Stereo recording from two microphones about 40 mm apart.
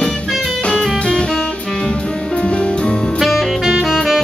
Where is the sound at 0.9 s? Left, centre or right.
Left.